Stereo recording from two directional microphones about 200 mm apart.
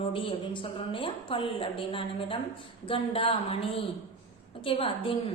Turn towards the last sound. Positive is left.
turn(degrees=25)  # may be behind; listen again after turning